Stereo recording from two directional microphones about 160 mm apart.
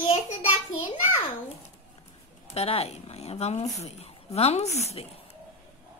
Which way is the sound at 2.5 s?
40° left (ahead or behind).